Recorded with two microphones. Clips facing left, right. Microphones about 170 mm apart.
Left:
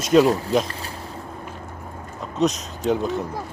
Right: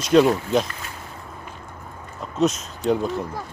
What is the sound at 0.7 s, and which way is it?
Boat, 35° left (ahead or behind).